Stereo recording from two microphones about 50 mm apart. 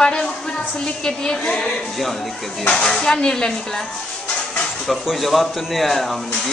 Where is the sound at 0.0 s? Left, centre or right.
Centre.